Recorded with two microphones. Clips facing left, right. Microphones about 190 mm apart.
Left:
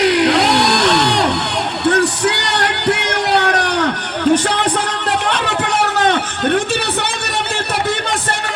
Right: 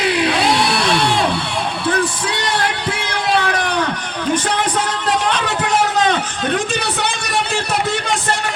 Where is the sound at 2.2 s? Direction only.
70° left (ahead or behind).